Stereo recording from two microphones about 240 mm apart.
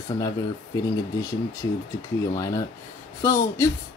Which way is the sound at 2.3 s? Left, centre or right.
Centre.